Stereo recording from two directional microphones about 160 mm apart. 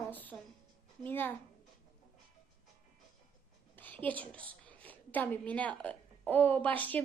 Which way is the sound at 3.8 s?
10° left (ahead or behind).